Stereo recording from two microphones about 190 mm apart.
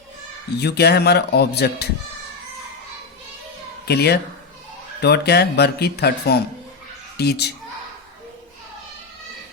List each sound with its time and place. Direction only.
0.5 s speech: 60° left (ahead or behind)
3.8 s speech: 60° left (ahead or behind)